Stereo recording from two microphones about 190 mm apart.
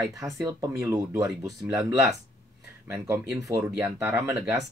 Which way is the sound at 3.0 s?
15° right (ahead or behind).